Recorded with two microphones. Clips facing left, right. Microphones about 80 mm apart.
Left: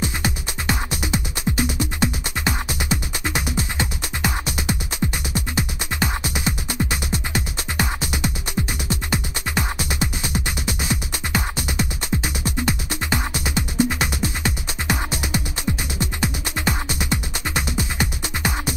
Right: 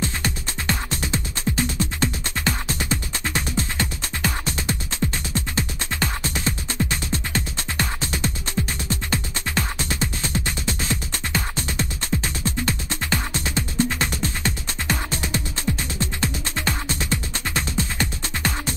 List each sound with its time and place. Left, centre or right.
0.0 s music: centre